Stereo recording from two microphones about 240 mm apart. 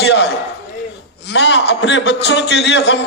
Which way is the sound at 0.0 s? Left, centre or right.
Left.